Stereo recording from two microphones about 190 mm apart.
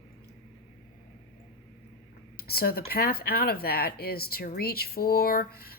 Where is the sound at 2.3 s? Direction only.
55° left (ahead or behind).